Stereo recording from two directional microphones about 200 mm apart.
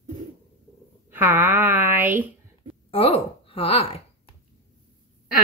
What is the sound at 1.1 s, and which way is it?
Speech, 10° right (ahead or behind).